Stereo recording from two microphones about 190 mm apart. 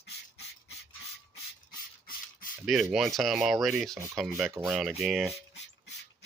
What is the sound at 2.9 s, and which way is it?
Speech, centre (ahead or behind).